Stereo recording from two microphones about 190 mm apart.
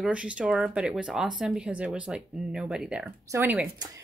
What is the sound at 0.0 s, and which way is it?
Speech, 5° right (ahead or behind).